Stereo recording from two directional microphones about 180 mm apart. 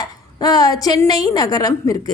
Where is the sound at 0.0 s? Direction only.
20° left (ahead or behind).